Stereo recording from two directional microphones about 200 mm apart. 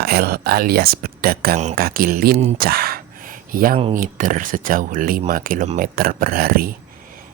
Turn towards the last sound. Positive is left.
turn(degrees=-45)  # may be behind; listen again after turning